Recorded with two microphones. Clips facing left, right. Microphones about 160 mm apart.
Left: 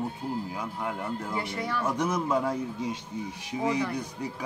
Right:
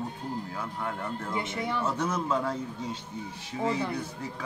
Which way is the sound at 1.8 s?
10° left (ahead or behind).